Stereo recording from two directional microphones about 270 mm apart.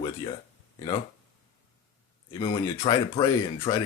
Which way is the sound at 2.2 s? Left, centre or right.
Centre.